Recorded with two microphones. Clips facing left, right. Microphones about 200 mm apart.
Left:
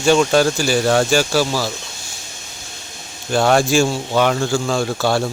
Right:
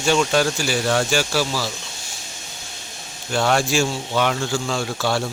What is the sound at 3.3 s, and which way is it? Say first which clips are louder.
A man's voice: left 5 dB; 45° left (ahead or behind).